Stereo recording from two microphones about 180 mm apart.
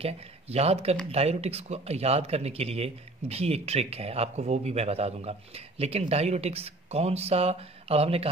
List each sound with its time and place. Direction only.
0.0 s speech: 35° right (ahead or behind)